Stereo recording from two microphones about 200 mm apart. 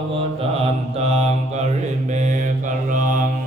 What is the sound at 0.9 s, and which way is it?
Mantra, 30° right (ahead or behind).